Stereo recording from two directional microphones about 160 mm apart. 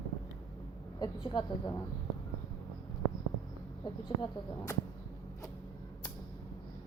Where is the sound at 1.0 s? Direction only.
30° left (ahead or behind).